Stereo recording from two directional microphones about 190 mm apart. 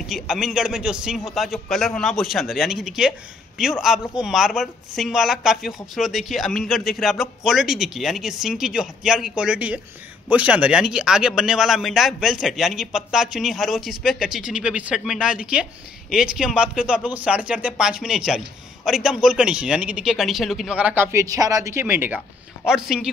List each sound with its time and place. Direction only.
0.0 s speech: centre (ahead or behind)